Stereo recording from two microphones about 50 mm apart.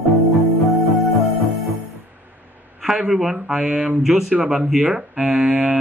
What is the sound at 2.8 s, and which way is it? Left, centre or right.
Speech, centre.